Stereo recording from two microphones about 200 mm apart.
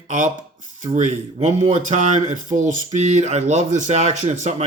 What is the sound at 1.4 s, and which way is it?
A man's voice, 35° right (ahead or behind).